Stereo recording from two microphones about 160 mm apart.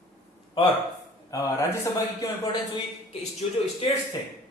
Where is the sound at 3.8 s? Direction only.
40° left (ahead or behind).